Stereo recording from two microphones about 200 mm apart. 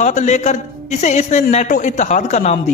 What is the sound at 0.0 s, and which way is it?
A man's voice, 35° left (ahead or behind).